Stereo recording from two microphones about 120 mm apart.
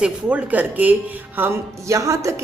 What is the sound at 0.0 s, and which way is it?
Speech, 10° right (ahead or behind).